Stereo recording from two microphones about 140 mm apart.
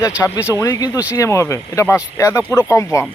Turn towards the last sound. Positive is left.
turn(degrees=20)  # may be behind; listen again after turning